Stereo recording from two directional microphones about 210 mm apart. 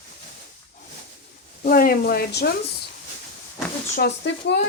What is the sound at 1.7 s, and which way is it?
Speech, 45° left (ahead or behind).